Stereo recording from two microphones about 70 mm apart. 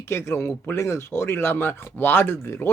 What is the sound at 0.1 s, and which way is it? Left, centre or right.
Speech, left.